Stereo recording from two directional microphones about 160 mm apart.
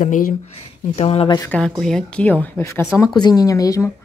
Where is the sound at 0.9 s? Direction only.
35° left (ahead or behind).